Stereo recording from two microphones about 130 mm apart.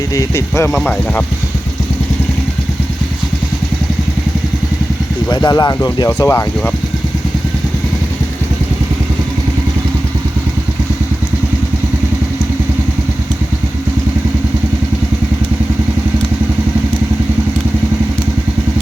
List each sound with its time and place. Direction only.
0.1 s speech: 25° left (ahead or behind)
5.3 s speech: 35° left (ahead or behind)